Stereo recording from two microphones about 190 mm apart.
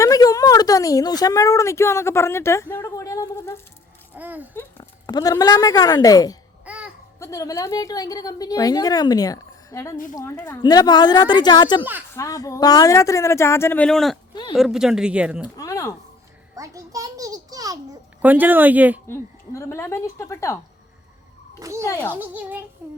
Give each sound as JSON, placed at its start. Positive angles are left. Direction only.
{"t": 0.0, "sound": "speech", "side_deg": 20}
{"t": 4.1, "sound": "speech", "side_deg": -10}
{"t": 4.8, "sound": "a woman's voice", "side_deg": 20}
{"t": 6.7, "sound": "babbling", "side_deg": -5}
{"t": 7.2, "sound": "a woman's voice", "side_deg": 15}
{"t": 10.6, "sound": "a woman's voice", "side_deg": 20}
{"t": 15.5, "sound": "a woman's voice", "side_deg": 15}
{"t": 16.6, "sound": "a child's voice", "side_deg": -15}
{"t": 18.2, "sound": "speech", "side_deg": -10}
{"t": 19.0, "sound": "a woman's voice", "side_deg": 15}
{"t": 21.6, "sound": "speech", "side_deg": -15}
{"t": 21.8, "sound": "a woman's voice", "side_deg": 10}
{"t": 22.1, "sound": "speech", "side_deg": -10}